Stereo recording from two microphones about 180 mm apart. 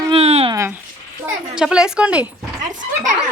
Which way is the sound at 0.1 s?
35° right (ahead or behind).